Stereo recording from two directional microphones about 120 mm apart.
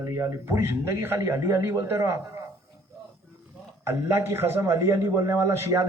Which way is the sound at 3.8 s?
20° right (ahead or behind).